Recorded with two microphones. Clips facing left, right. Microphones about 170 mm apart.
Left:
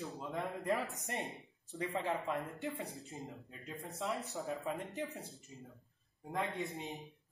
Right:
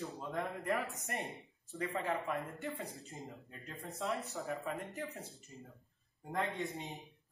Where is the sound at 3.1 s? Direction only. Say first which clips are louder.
Left 1 dB; centre (ahead or behind).